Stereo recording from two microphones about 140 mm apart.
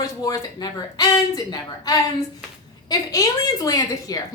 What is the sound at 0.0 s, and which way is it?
A woman's voice, 25° left (ahead or behind).